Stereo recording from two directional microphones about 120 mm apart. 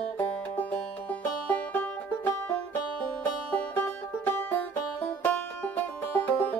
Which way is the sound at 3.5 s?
15° left (ahead or behind).